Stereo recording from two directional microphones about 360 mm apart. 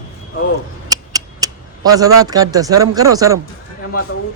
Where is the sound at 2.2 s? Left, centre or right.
Centre.